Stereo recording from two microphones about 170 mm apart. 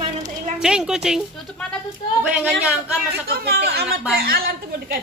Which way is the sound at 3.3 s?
70° right (ahead or behind).